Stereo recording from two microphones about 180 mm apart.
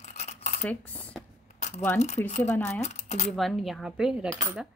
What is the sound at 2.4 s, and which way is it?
Speech, 15° left (ahead or behind).